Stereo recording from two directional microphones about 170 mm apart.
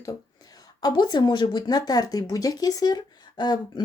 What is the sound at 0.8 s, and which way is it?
Speech, 25° left (ahead or behind).